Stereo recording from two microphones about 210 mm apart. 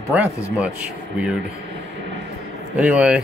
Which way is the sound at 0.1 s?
5° right (ahead or behind).